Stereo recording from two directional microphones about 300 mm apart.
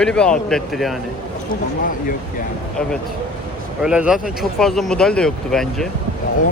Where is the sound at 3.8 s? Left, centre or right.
Centre.